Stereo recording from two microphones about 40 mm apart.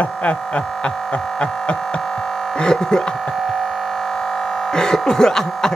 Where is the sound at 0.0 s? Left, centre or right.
Left.